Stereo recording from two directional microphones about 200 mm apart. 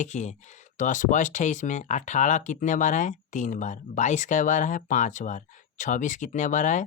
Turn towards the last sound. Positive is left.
turn(degrees=40)  # may be behind; listen again after turning